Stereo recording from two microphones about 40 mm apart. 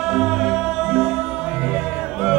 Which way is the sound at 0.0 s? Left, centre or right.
Centre.